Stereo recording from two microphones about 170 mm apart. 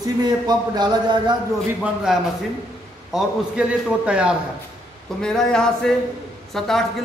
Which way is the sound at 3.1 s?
Centre (ahead or behind).